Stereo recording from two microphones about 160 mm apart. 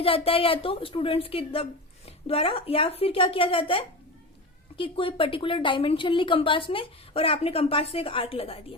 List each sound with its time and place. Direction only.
0.0 s a woman's voice: 35° left (ahead or behind)